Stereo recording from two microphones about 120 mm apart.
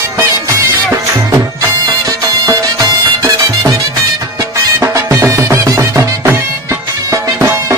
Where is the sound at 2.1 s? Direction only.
30° right (ahead or behind).